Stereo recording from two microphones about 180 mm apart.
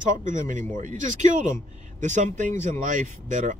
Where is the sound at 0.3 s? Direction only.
45° right (ahead or behind).